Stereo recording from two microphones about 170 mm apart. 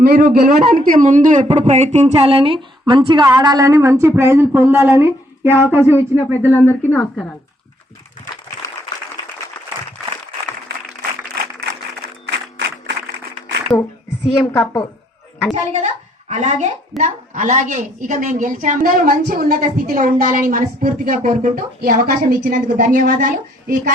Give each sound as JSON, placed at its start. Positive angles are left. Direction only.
{"t": 0.0, "sound": "a woman's voice", "side_deg": -60}
{"t": 6.7, "sound": "a woman's voice", "side_deg": 10}
{"t": 13.7, "sound": "a sound", "side_deg": 0}
{"t": 14.5, "sound": "a woman's voice", "side_deg": 10}
{"t": 15.5, "sound": "a child's voice", "side_deg": -40}